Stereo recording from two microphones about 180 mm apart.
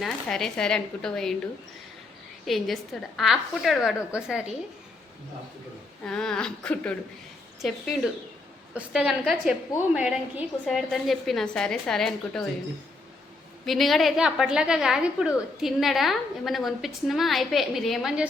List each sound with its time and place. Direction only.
0.0 s a woman's voice: centre (ahead or behind)
2.5 s a woman's voice: centre (ahead or behind)
6.1 s a woman's voice: 5° left (ahead or behind)
13.7 s a woman's voice: centre (ahead or behind)